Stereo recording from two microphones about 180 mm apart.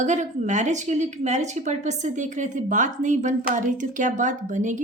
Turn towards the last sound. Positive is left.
turn(degrees=-45)  # may be behind; listen again after turning